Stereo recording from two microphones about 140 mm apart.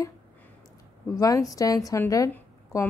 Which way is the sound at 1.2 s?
25° left (ahead or behind).